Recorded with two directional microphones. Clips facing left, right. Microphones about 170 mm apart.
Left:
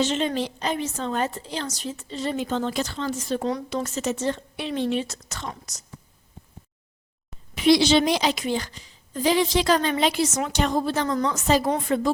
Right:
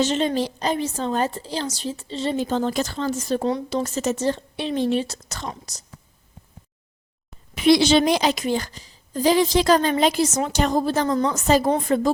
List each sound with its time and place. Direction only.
0.0 s a woman's voice: 35° right (ahead or behind)
7.5 s a woman's voice: 50° right (ahead or behind)
11.1 s a woman's voice: 30° right (ahead or behind)
11.3 s a woman's voice: 40° right (ahead or behind)